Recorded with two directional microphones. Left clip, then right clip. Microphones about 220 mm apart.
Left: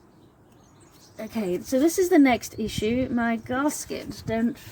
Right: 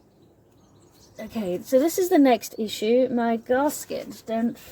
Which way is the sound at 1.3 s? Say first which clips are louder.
Right 3 dB; 25° right (ahead or behind).